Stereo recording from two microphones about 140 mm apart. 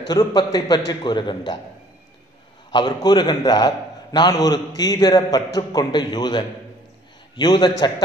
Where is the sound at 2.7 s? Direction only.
30° left (ahead or behind).